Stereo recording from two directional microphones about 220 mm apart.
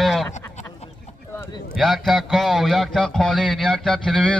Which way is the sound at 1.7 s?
Centre (ahead or behind).